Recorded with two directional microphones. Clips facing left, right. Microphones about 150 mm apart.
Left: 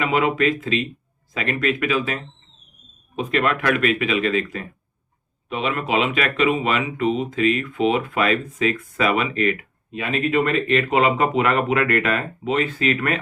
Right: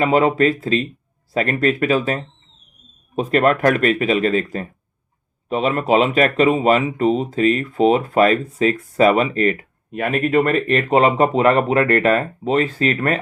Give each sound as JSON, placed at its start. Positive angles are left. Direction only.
{"t": 0.0, "sound": "speech", "side_deg": -35}